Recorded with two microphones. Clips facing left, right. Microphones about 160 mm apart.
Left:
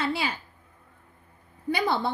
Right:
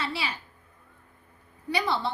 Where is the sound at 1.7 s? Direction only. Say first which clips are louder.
Left 2 dB; 50° left (ahead or behind).